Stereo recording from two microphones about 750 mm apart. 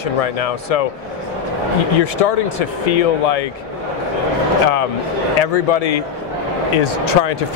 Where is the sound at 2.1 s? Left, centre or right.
Left.